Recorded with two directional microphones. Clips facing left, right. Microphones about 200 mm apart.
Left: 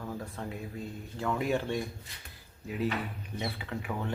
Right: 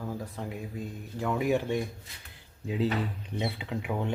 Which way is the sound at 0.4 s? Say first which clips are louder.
Right 2 dB; 15° right (ahead or behind).